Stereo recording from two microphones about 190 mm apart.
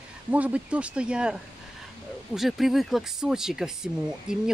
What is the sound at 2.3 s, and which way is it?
Speech, centre (ahead or behind).